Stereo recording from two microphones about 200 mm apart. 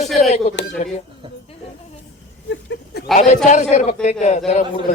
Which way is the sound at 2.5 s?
65° left (ahead or behind).